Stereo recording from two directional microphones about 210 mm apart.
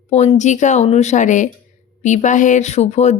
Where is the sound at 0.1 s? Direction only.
30° left (ahead or behind).